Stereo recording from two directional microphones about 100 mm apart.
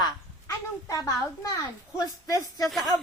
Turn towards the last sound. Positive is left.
turn(degrees=5)  # may be behind; listen again after turning